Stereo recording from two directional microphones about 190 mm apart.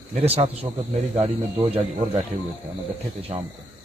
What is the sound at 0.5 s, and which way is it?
Speech, 30° right (ahead or behind).